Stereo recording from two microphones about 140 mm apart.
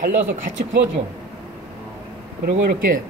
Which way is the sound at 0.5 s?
75° right (ahead or behind).